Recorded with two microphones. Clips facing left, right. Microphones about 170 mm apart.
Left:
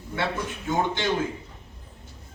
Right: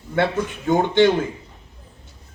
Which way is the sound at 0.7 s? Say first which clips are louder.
Right 10 dB; 60° right (ahead or behind).